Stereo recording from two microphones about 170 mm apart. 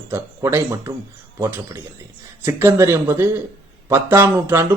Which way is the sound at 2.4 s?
15° right (ahead or behind).